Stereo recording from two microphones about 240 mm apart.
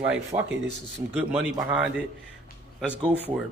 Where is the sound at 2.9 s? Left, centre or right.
Centre.